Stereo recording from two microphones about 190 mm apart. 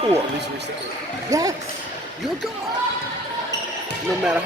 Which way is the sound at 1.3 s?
20° right (ahead or behind).